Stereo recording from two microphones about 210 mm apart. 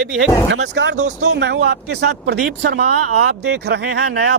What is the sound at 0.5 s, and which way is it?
Speech, 55° right (ahead or behind).